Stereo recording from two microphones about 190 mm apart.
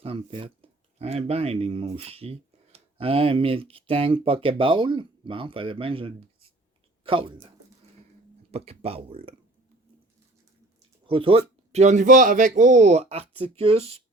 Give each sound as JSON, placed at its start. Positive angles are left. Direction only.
{"t": 0.0, "sound": "speech", "side_deg": -30}
{"t": 8.5, "sound": "speech", "side_deg": -30}
{"t": 11.0, "sound": "speech", "side_deg": -30}